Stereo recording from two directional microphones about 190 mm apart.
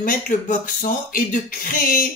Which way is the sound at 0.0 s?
45° left (ahead or behind).